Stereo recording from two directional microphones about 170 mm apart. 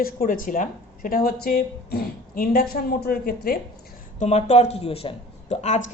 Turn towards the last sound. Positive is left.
turn(degrees=45)  # may be behind; listen again after turning